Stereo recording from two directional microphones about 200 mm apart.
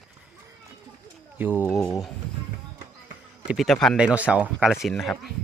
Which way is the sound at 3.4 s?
Centre (ahead or behind).